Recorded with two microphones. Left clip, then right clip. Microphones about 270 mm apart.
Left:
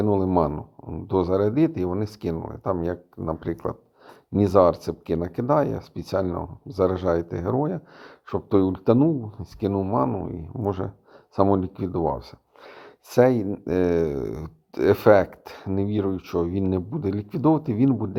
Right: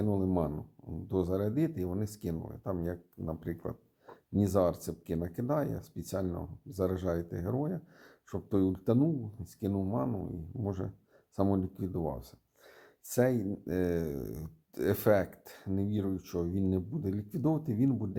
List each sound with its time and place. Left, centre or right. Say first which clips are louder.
0.0 s speech: left 11 dB; centre